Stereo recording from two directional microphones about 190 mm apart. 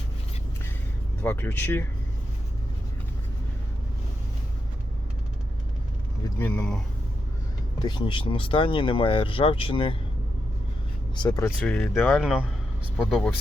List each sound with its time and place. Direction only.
1.2 s speech: 10° left (ahead or behind)
6.4 s speech: 5° left (ahead or behind)
7.8 s speech: 25° left (ahead or behind)
11.1 s speech: 25° left (ahead or behind)
11.4 s speech: 5° left (ahead or behind)